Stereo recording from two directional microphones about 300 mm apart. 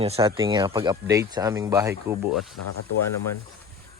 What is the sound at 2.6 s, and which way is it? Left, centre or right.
Speech, left.